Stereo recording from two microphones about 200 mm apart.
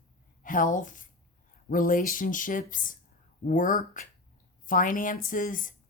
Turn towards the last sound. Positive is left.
turn(degrees=40)  # may be behind; listen again after turning